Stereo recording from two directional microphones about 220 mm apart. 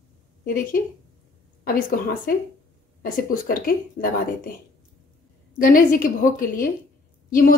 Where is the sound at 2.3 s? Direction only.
40° left (ahead or behind).